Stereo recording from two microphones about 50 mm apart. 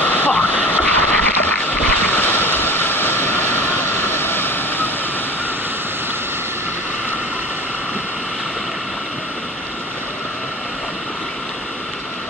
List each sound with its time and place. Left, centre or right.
0.0 s vehicle: left